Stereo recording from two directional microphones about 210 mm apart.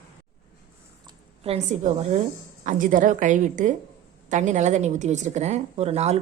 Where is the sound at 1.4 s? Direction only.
35° right (ahead or behind).